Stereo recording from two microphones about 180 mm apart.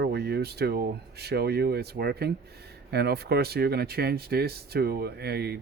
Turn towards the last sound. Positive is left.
turn(degrees=-65)  # may be behind; listen again after turning